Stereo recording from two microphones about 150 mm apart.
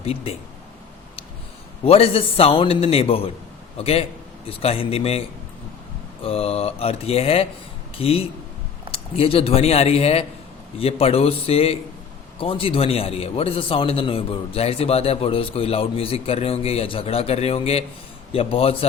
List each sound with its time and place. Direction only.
0.0 s a man's voice: 40° left (ahead or behind)
1.8 s a man's voice: 40° left (ahead or behind)
6.2 s a man's voice: 40° left (ahead or behind)